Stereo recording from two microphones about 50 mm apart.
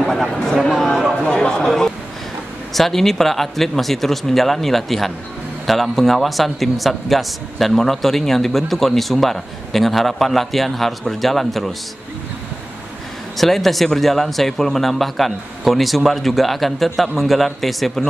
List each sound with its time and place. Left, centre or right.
0.6 s a sound: centre
1.2 s chatter: centre
2.7 s a man's voice: centre
13.4 s a man's voice: centre